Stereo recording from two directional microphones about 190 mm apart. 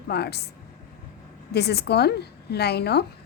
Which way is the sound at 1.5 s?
60° left (ahead or behind).